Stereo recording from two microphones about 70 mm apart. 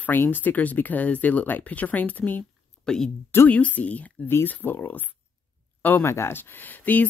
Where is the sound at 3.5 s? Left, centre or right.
Left.